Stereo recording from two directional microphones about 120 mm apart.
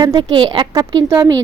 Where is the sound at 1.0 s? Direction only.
25° right (ahead or behind).